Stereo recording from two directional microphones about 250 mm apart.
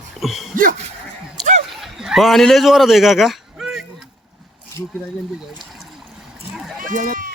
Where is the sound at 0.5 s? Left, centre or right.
Right.